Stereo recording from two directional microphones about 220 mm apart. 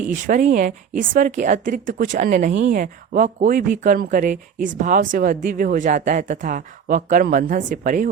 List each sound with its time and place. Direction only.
0.3 s a woman's voice: 35° right (ahead or behind)